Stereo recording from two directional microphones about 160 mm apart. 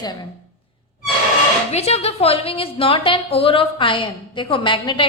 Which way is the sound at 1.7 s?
40° left (ahead or behind).